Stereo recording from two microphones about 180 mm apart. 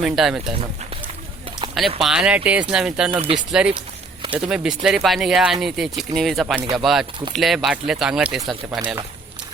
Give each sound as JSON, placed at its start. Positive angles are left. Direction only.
{"t": 0.0, "sound": "speech", "side_deg": 0}
{"t": 2.0, "sound": "speech", "side_deg": -5}
{"t": 3.1, "sound": "speech", "side_deg": -30}
{"t": 3.6, "sound": "speech", "side_deg": -5}